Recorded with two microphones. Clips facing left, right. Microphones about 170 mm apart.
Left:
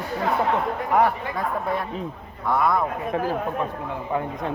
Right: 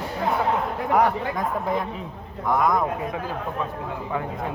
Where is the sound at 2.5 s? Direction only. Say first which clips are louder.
Even; 15° right (ahead or behind).